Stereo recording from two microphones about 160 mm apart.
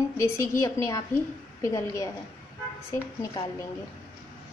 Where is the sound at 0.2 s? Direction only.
20° left (ahead or behind).